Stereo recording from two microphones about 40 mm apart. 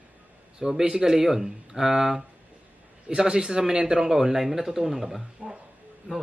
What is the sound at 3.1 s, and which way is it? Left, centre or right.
Speech, centre.